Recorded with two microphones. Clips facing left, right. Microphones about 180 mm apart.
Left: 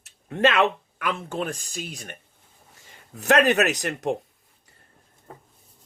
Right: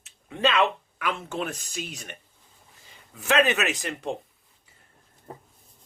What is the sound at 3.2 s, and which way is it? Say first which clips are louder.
Speech: left 4 dB; 70° left (ahead or behind).